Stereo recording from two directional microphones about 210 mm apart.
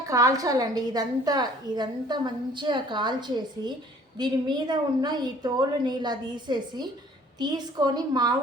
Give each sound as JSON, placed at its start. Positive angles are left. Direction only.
{"t": 0.0, "sound": "a woman's voice", "side_deg": -15}